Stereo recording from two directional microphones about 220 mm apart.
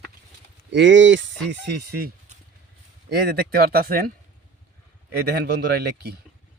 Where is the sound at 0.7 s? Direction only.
55° right (ahead or behind).